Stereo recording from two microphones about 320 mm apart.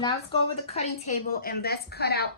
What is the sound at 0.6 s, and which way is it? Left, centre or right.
A woman's voice, centre.